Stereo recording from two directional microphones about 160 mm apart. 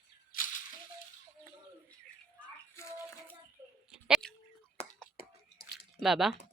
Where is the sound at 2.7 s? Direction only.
15° left (ahead or behind).